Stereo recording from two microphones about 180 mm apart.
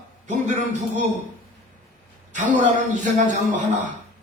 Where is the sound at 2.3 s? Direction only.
40° right (ahead or behind).